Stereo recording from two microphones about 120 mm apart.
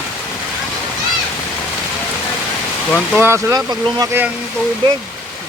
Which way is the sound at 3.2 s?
20° right (ahead or behind).